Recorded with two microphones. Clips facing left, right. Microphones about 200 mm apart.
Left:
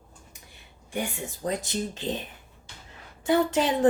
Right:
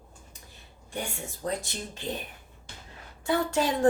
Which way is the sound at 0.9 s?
15° left (ahead or behind).